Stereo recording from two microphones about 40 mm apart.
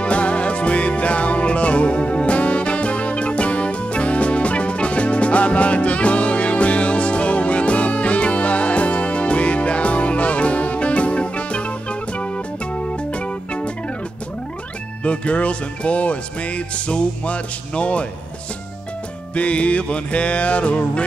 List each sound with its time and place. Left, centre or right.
0.0 s music: left
12.7 s music: left
15.0 s music: left
19.3 s music: left